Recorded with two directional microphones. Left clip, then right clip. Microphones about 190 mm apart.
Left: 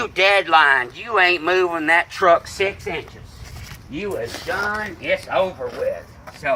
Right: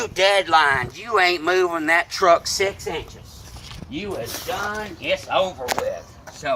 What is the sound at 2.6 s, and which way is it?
Speech, 25° left (ahead or behind).